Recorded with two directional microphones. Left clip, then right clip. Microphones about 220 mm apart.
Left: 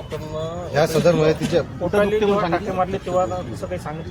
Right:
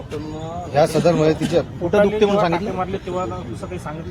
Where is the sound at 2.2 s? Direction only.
40° right (ahead or behind).